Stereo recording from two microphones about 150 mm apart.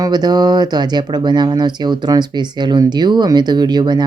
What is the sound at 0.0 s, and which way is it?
Speech, 25° right (ahead or behind).